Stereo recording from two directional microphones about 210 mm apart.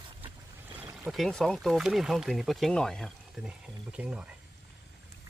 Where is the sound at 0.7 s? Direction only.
5° right (ahead or behind).